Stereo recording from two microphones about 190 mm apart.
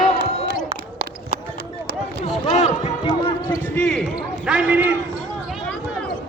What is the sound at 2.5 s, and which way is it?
Run, 35° left (ahead or behind).